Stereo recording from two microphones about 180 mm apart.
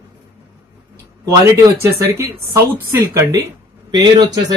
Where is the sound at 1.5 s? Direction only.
15° right (ahead or behind).